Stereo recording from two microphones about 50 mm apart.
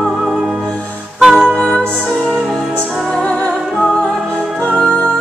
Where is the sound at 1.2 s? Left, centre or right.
Centre.